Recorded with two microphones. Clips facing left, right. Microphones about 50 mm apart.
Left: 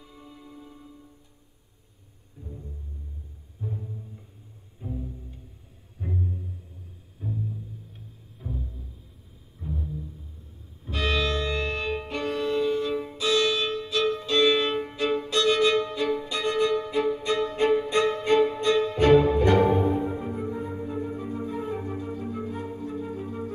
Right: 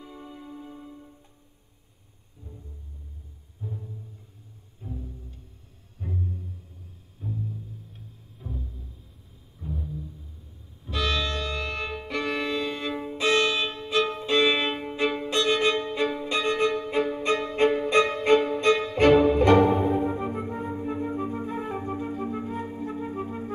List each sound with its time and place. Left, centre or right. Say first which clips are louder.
0.0 s music: right 5 dB; right
3.6 s music: left 3 dB; centre
9.6 s a sound: left 1 dB; centre
10.9 s music: left 1 dB; centre
12.1 s music: right 1 dB; right
19.8 s music: right 1 dB; centre
20.1 s flute: right 1 dB; right
22.8 s music: right 1 dB; right